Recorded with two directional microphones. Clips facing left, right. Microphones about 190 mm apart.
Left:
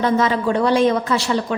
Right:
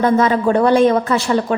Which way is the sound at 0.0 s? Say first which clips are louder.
Right 4 dB; 50° right (ahead or behind).